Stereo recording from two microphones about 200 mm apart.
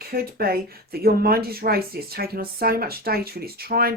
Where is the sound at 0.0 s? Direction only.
50° right (ahead or behind).